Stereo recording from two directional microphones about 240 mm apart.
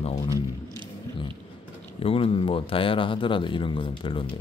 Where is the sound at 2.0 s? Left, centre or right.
Left.